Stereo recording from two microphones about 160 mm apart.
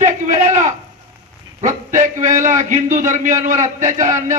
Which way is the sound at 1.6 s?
55° right (ahead or behind).